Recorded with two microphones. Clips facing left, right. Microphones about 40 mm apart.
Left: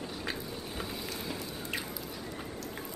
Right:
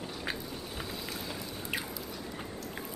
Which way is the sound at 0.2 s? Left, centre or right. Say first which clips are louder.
Right 1 dB; centre.